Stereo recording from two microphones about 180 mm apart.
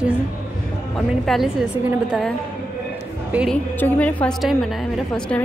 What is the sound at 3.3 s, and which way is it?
Speech, 5° right (ahead or behind).